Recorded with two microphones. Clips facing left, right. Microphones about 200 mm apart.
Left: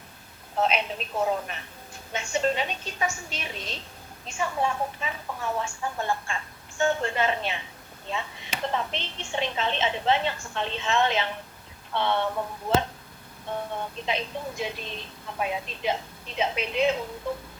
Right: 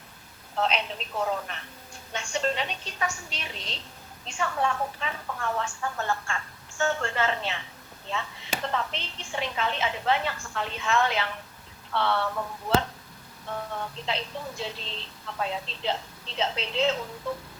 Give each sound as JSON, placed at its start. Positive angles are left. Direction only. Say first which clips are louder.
{"t": 0.5, "sound": "speech", "louder": "left 2 dB", "side_deg": 10}
{"t": 2.1, "sound": "speech", "louder": "left 3 dB", "side_deg": 5}
{"t": 3.2, "sound": "a woman's voice", "louder": "left 3 dB", "side_deg": 50}
{"t": 4.3, "sound": "speech", "louder": "even", "side_deg": 10}